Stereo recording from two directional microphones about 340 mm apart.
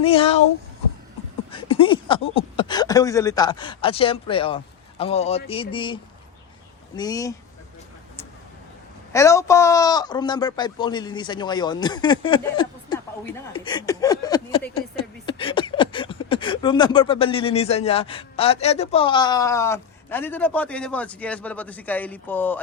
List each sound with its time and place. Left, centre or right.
0.0 s speech: centre
1.5 s speech: centre
9.1 s speech: centre